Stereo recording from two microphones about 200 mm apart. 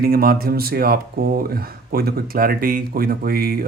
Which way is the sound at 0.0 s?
50° right (ahead or behind).